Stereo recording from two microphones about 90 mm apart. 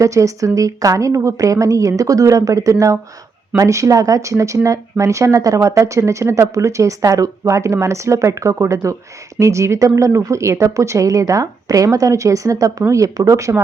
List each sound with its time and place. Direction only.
0.0 s speech: 35° right (ahead or behind)